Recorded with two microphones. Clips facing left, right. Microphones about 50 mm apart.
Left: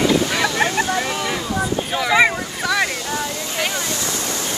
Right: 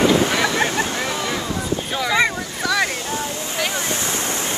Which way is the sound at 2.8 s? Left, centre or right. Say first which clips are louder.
Left 1 dB; left.